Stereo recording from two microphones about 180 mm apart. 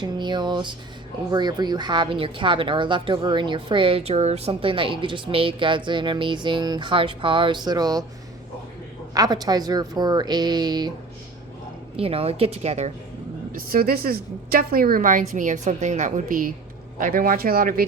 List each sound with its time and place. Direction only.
0.0 s speech: 25° right (ahead or behind)
9.1 s speech: 20° right (ahead or behind)
11.9 s a woman's voice: 30° right (ahead or behind)
13.5 s a woman's voice: 50° right (ahead or behind)